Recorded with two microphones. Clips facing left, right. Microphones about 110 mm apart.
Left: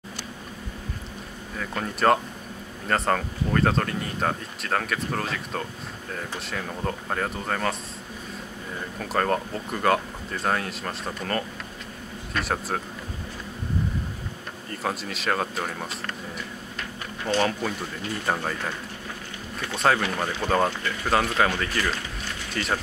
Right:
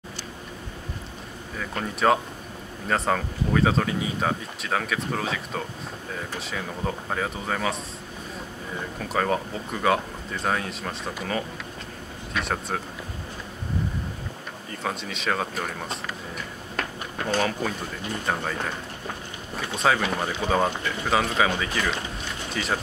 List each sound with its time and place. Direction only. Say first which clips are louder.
1.6 s speech: even; centre (ahead or behind)
9.1 s speech: left 1 dB; centre (ahead or behind)
14.7 s speech: left 1 dB; centre (ahead or behind)
16.7 s a sound: right 7 dB; 50° right (ahead or behind)
17.4 s speech: left 2 dB; centre (ahead or behind)
19.7 s speech: even; centre (ahead or behind)